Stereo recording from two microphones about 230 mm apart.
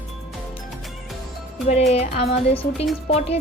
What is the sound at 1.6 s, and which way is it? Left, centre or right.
Speech, left.